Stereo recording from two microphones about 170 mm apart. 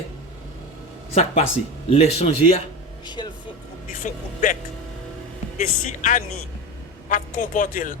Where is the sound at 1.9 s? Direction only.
40° left (ahead or behind).